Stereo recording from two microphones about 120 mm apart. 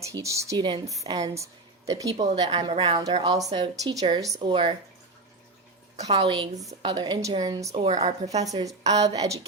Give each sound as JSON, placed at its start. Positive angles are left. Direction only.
{"t": 0.0, "sound": "speech", "side_deg": -25}
{"t": 0.5, "sound": "a woman's voice", "side_deg": -35}
{"t": 2.3, "sound": "a woman's voice", "side_deg": -40}
{"t": 3.1, "sound": "a woman's voice", "side_deg": -40}
{"t": 6.1, "sound": "a woman's voice", "side_deg": -45}
{"t": 8.0, "sound": "speech", "side_deg": -65}
{"t": 8.6, "sound": "a woman's voice", "side_deg": -30}